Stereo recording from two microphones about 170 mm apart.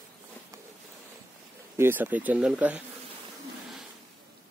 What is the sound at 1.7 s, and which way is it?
Speech, 15° right (ahead or behind).